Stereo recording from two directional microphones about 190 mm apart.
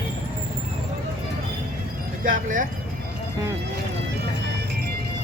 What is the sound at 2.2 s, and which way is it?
Speech, 45° right (ahead or behind).